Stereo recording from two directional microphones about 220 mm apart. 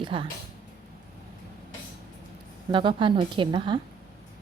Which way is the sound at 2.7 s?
20° right (ahead or behind).